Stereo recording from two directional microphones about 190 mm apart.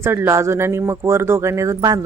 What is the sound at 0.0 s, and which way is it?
Speech, 15° right (ahead or behind).